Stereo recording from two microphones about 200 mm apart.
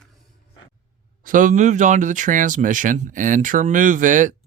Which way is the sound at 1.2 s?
40° right (ahead or behind).